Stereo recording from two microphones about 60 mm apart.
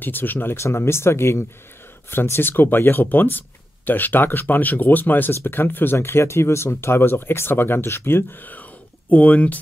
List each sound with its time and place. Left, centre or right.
0.0 s speech: left
0.6 s speech: left
5.9 s speech: left